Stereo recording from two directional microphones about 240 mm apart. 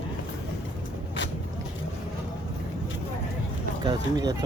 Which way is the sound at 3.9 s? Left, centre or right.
Centre.